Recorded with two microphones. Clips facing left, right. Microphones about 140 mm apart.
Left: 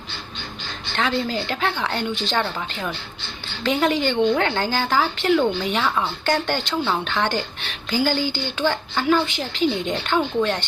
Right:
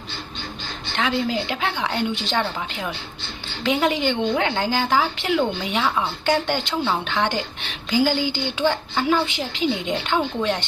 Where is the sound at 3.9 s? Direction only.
20° right (ahead or behind).